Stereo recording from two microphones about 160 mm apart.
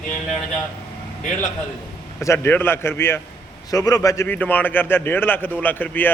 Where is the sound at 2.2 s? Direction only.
15° left (ahead or behind).